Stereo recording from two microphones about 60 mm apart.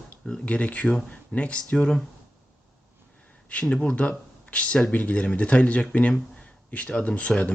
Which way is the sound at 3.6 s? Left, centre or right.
Centre.